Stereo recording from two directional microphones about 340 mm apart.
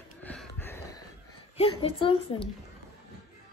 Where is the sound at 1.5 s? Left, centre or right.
Centre.